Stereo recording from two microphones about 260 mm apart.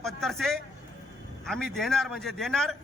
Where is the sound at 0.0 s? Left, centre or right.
Centre.